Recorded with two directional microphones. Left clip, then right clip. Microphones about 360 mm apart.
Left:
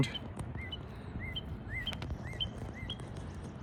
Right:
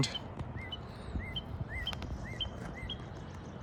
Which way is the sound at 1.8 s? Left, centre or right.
Right.